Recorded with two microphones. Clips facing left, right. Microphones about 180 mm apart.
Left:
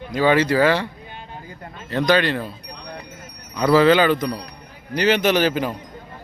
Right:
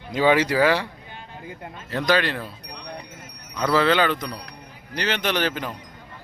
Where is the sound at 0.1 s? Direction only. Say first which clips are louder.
Left 2 dB; 15° right (ahead or behind).